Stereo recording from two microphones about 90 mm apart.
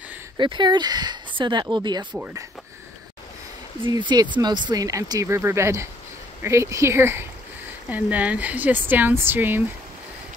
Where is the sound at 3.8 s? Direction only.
55° right (ahead or behind); by 9.6 s 25° right (ahead or behind).